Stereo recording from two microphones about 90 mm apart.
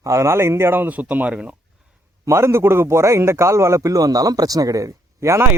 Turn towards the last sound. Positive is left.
turn(degrees=-35)  # may be behind; listen again after turning